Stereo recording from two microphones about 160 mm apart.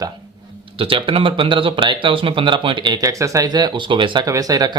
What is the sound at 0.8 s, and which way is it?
Speech, 35° right (ahead or behind).